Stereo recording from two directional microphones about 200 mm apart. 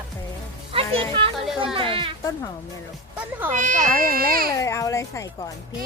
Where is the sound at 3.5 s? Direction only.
40° right (ahead or behind).